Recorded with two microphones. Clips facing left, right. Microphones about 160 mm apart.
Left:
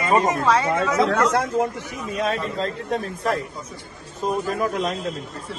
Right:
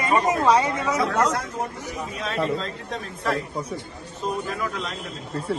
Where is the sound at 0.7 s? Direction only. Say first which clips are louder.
Left 4 dB; 90° left.